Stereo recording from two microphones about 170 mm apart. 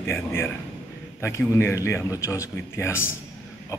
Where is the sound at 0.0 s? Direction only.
15° left (ahead or behind).